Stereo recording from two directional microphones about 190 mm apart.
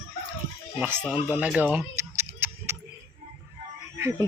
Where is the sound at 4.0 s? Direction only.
15° right (ahead or behind).